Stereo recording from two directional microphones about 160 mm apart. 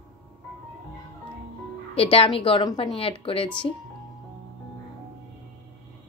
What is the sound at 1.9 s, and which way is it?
A woman's voice, 35° left (ahead or behind).